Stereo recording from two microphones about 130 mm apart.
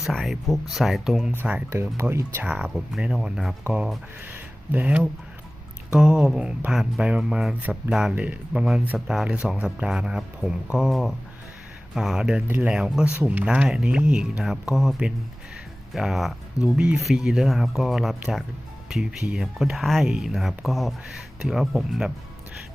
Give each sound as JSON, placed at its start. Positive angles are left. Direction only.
{"t": 0.0, "sound": "speech", "side_deg": 0}
{"t": 1.4, "sound": "speech", "side_deg": -15}
{"t": 2.5, "sound": "speech", "side_deg": -5}
{"t": 12.5, "sound": "speech", "side_deg": -15}
{"t": 12.7, "sound": "speech", "side_deg": -5}